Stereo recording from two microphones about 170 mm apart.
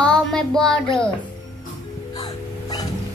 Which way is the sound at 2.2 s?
25° left (ahead or behind).